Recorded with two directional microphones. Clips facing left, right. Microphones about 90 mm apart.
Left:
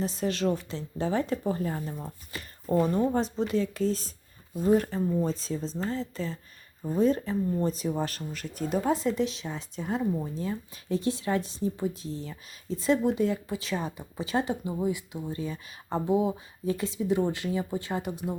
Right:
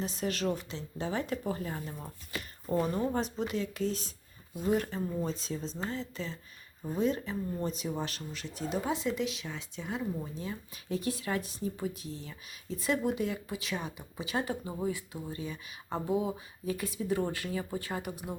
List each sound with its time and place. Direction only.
0.0 s speech: 35° left (ahead or behind)
2.0 s a sound: 35° left (ahead or behind)
2.8 s speech: 25° left (ahead or behind)
3.2 s speech: 35° left (ahead or behind)
14.7 s speech: 20° left (ahead or behind)
15.3 s speech: 35° left (ahead or behind)